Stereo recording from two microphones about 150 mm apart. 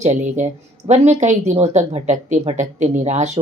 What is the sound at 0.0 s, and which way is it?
A woman's voice, 50° right (ahead or behind).